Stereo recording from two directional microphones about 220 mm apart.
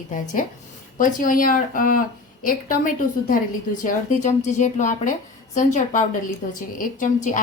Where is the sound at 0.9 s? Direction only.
40° left (ahead or behind).